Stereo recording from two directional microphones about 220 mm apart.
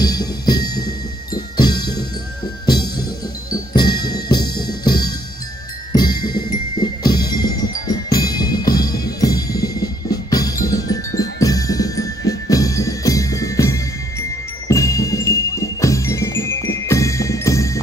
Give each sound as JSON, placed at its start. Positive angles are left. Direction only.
{"t": 0.0, "sound": "music", "side_deg": 20}
{"t": 0.7, "sound": "music", "side_deg": 45}
{"t": 3.8, "sound": "music", "side_deg": 45}
{"t": 4.8, "sound": "music", "side_deg": 20}